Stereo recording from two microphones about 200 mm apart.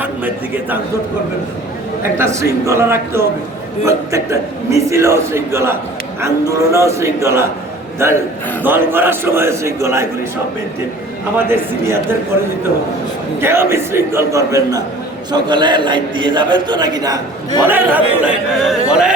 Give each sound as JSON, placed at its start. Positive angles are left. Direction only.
{"t": 2.1, "sound": "a man's voice", "side_deg": -15}
{"t": 11.3, "sound": "a man's voice", "side_deg": -10}
{"t": 13.4, "sound": "a man's voice", "side_deg": -10}
{"t": 17.7, "sound": "a man's voice", "side_deg": -10}